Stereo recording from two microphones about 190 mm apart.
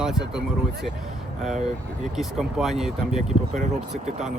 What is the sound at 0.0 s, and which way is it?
Speech, centre (ahead or behind).